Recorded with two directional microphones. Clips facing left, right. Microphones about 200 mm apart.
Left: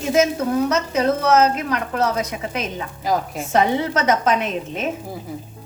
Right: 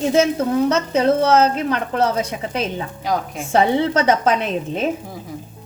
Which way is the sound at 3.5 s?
30° right (ahead or behind).